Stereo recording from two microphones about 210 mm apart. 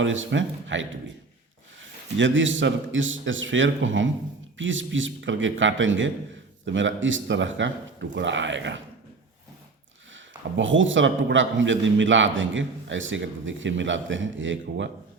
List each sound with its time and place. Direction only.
0.0 s a man's voice: 65° right (ahead or behind)
2.1 s a man's voice: 60° right (ahead or behind)
10.2 s a man's voice: 65° right (ahead or behind)